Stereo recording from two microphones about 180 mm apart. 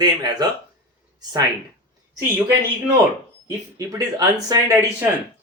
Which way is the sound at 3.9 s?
20° right (ahead or behind).